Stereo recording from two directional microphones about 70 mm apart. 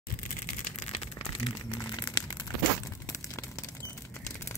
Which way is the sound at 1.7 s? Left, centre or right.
Left.